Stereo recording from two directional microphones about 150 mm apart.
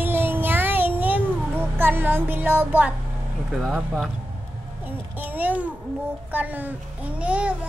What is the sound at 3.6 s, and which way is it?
Speech, 5° right (ahead or behind).